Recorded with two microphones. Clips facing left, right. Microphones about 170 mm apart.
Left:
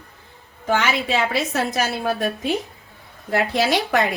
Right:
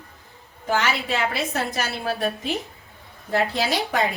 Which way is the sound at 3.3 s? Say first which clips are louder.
Left 3 dB; 75° left (ahead or behind).